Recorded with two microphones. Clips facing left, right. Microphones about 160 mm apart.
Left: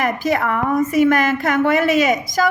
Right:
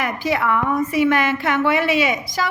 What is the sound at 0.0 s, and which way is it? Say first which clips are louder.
A woman's voice: left 2 dB; 45° left (ahead or behind).